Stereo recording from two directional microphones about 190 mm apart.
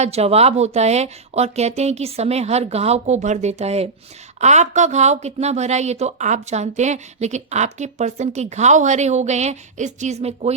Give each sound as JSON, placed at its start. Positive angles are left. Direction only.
{"t": 0.0, "sound": "speech", "side_deg": -35}